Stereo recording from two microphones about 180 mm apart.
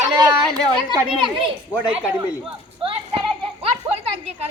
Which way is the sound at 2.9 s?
30° right (ahead or behind).